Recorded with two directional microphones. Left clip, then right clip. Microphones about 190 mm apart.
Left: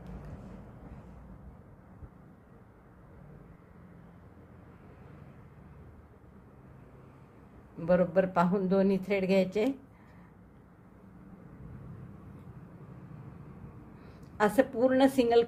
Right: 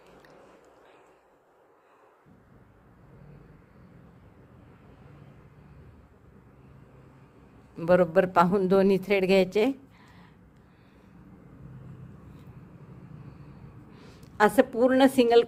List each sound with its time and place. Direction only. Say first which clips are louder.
7.8 s speech: right 5 dB; 40° right (ahead or behind)
14.0 s a woman's voice: right 6 dB; 40° right (ahead or behind)